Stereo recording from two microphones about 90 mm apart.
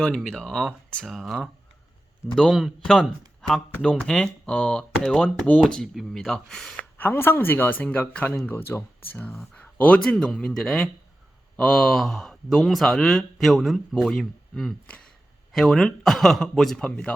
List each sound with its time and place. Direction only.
0.0 s speech: 5° left (ahead or behind)
7.0 s speech: 25° left (ahead or behind); by 17.1 s 10° left (ahead or behind)